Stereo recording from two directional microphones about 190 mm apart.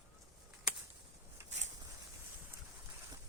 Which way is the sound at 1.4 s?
40° right (ahead or behind).